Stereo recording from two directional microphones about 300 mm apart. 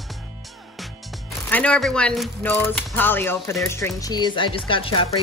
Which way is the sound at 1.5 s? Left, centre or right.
Centre.